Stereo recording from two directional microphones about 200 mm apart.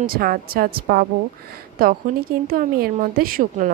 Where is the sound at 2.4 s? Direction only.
45° right (ahead or behind).